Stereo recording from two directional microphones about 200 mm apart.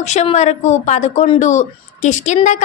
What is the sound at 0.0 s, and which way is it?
A woman's voice, 35° left (ahead or behind).